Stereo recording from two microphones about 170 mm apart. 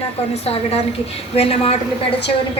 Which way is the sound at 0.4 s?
35° left (ahead or behind).